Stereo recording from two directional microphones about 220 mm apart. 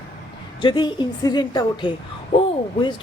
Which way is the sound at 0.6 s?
20° left (ahead or behind).